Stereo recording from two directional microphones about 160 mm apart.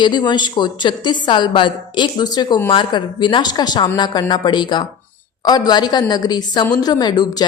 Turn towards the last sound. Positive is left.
turn(degrees=25)  # may be behind; listen again after turning